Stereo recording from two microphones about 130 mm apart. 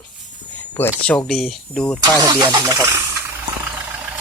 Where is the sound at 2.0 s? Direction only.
30° right (ahead or behind).